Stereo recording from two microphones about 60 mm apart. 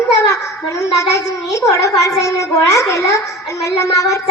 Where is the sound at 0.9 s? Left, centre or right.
Left.